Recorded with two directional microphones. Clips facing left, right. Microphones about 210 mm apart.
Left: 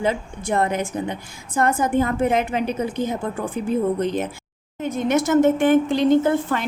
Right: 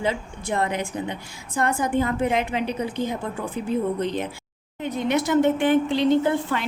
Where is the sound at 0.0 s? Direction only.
50° left (ahead or behind).